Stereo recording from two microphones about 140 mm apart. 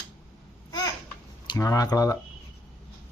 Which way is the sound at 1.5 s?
25° left (ahead or behind).